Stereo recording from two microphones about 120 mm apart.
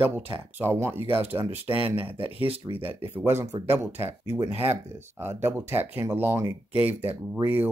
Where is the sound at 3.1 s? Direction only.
20° right (ahead or behind).